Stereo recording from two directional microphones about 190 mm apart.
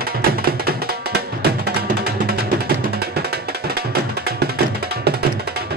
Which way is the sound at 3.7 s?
55° right (ahead or behind).